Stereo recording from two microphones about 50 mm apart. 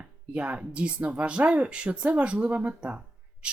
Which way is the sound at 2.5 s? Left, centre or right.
Right.